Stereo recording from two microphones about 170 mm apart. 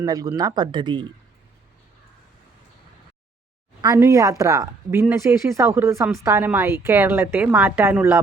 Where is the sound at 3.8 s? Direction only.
20° right (ahead or behind).